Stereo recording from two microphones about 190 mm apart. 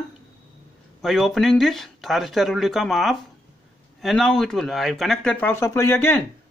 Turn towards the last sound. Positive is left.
turn(degrees=10)  # may be behind; listen again after turning